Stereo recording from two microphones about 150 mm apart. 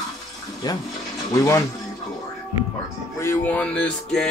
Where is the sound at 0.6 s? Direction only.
25° left (ahead or behind).